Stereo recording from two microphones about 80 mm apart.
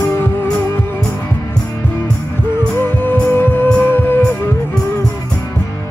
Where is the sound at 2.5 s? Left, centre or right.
Left.